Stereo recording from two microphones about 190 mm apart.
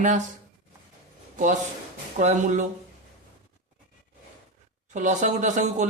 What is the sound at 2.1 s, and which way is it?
Speech, 40° right (ahead or behind).